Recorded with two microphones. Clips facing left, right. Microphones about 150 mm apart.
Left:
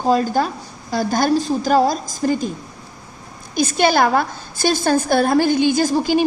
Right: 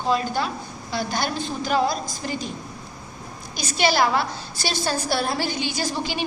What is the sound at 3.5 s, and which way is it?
A woman's voice, 50° left (ahead or behind).